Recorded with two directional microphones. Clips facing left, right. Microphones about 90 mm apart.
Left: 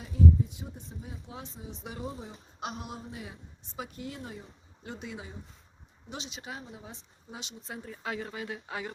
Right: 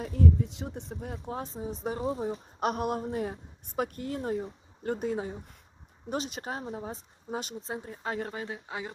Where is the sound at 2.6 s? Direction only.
50° right (ahead or behind).